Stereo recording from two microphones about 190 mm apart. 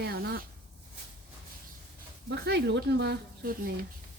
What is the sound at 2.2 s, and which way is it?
Speech, 60° right (ahead or behind).